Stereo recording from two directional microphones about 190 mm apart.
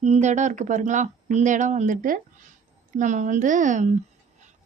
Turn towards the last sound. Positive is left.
turn(degrees=-40)  # may be behind; listen again after turning